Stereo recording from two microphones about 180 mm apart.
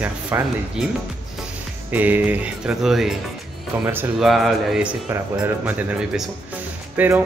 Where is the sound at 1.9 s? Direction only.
10° right (ahead or behind).